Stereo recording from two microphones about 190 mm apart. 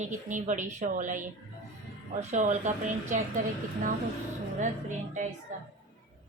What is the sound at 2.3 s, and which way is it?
Speech, 40° right (ahead or behind).